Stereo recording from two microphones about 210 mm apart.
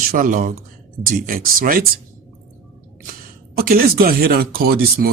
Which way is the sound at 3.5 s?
45° right (ahead or behind).